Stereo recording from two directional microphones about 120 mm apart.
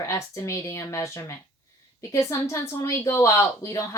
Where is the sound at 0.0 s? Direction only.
25° left (ahead or behind).